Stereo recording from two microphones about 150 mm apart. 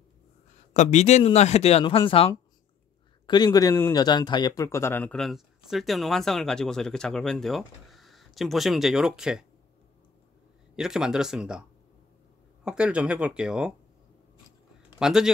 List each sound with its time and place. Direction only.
0.7 s speech: 50° left (ahead or behind)
3.3 s a man's voice: 25° left (ahead or behind); by 9.5 s 5° right (ahead or behind)
10.8 s speech: 5° right (ahead or behind)
12.6 s speech: 5° right (ahead or behind)
15.0 s speech: 5° right (ahead or behind)